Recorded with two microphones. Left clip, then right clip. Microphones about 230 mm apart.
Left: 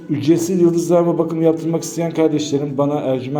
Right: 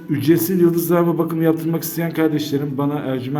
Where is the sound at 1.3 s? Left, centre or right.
Centre.